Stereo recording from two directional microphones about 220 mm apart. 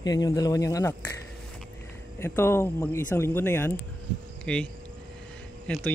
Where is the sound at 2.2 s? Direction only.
10° left (ahead or behind).